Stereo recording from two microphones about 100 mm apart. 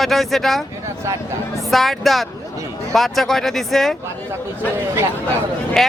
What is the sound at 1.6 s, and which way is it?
Speech, centre (ahead or behind).